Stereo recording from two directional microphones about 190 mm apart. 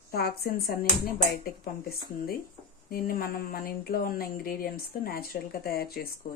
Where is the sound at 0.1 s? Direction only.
55° left (ahead or behind).